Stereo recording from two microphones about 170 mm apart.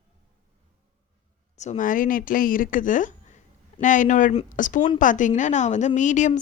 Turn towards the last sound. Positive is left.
turn(degrees=45)  # may be behind; listen again after turning